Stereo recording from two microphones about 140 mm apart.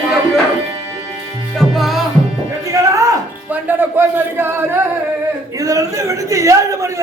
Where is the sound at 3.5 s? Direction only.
15° right (ahead or behind).